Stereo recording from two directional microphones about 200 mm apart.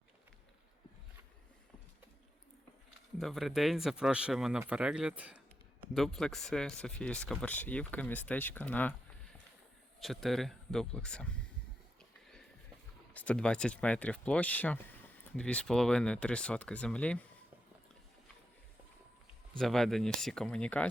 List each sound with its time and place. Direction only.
3.2 s speech: centre (ahead or behind)
10.0 s speech: centre (ahead or behind)
13.1 s speech: 5° left (ahead or behind)
19.5 s speech: centre (ahead or behind)